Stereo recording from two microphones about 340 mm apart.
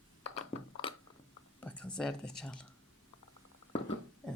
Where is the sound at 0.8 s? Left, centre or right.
Centre.